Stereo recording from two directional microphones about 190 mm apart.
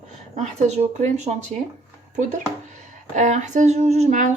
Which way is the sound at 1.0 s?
40° right (ahead or behind).